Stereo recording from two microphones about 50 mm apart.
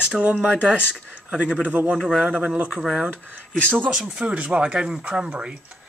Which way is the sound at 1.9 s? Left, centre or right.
Centre.